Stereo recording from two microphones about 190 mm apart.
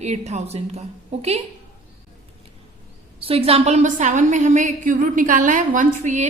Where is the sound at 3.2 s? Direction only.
30° right (ahead or behind).